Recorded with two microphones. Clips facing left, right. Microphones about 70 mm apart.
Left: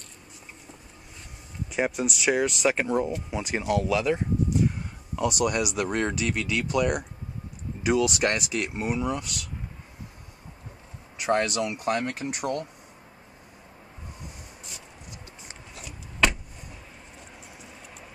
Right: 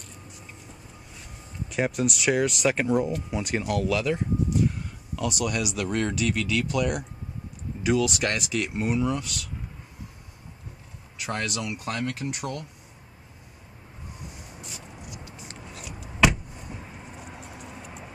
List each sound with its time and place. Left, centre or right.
1.7 s speech: centre
5.1 s speech: left
8.7 s speech: centre
11.1 s speech: left
15.7 s vehicle: centre